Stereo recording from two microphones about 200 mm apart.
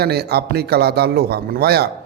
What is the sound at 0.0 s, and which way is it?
A man's voice, 55° right (ahead or behind).